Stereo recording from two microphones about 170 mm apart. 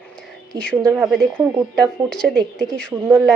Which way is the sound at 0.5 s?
25° right (ahead or behind).